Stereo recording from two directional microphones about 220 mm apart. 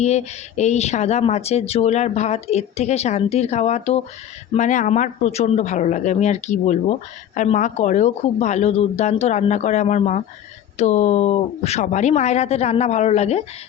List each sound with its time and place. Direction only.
0.0 s speech: 30° left (ahead or behind)